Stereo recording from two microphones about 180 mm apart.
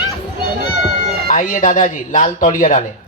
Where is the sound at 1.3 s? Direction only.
40° left (ahead or behind).